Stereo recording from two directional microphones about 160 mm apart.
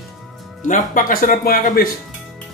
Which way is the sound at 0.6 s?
55° left (ahead or behind).